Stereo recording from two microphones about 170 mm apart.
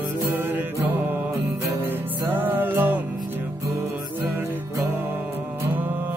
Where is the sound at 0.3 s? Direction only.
10° right (ahead or behind).